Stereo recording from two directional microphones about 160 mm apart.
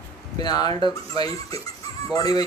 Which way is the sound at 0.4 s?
25° left (ahead or behind).